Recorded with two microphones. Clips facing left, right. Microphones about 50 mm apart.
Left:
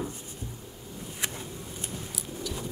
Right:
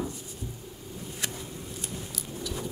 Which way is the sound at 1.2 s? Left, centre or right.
Left.